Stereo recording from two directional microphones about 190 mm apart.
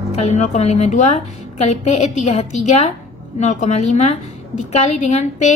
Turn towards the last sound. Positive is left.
turn(degrees=35)  # may be behind; listen again after turning